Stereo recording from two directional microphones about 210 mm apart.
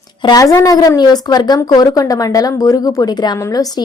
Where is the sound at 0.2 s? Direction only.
20° left (ahead or behind).